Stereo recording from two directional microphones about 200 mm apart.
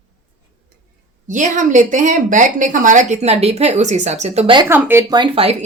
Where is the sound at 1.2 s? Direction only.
40° right (ahead or behind).